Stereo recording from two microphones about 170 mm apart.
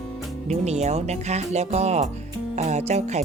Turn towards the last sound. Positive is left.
turn(degrees=-40)  # may be behind; listen again after turning